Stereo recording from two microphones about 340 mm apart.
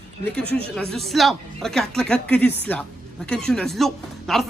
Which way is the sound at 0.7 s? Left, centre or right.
Centre.